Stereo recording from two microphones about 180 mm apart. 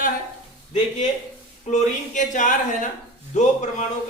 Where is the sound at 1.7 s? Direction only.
45° left (ahead or behind).